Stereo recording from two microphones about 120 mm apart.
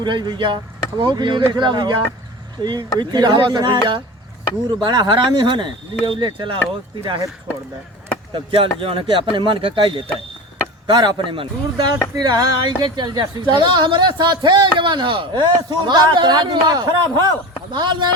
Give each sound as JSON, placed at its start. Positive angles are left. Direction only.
{"t": 0.0, "sound": "speech", "side_deg": -40}
{"t": 4.8, "sound": "speech", "side_deg": -40}
{"t": 8.3, "sound": "speech", "side_deg": -45}
{"t": 12.1, "sound": "speech", "side_deg": -35}